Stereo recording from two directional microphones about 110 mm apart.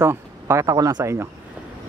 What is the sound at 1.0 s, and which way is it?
Speech, 25° right (ahead or behind).